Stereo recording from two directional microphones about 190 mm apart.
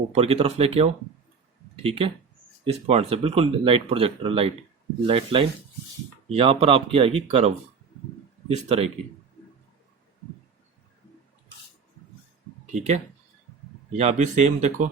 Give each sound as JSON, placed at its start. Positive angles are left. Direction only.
{"t": 0.1, "sound": "speech", "side_deg": -30}
{"t": 12.7, "sound": "speech", "side_deg": -35}